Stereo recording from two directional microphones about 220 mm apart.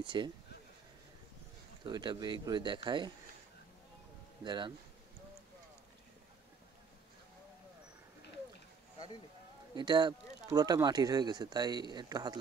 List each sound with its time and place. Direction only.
0.0 s speech: 20° right (ahead or behind)
1.9 s speech: 20° right (ahead or behind)
4.4 s speech: 20° right (ahead or behind)
9.8 s speech: 20° right (ahead or behind)